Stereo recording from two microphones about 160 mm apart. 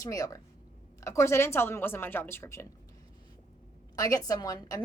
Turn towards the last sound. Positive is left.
turn(degrees=20)  # may be behind; listen again after turning